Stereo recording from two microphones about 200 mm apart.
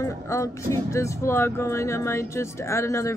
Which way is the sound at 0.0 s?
15° left (ahead or behind).